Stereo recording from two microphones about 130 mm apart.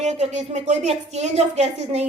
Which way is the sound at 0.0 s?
60° right (ahead or behind).